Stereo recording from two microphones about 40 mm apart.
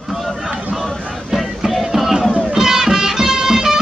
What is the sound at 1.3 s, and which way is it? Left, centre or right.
Music, centre.